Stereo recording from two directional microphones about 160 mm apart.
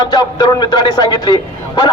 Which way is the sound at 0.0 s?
25° left (ahead or behind).